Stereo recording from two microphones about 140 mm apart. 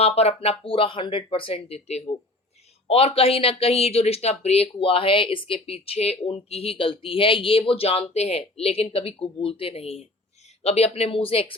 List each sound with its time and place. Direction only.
0.0 s speech: 45° left (ahead or behind)